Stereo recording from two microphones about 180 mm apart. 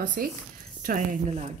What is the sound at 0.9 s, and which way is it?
Speech, 40° right (ahead or behind).